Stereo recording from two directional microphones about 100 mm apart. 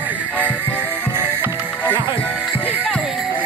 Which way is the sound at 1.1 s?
20° right (ahead or behind).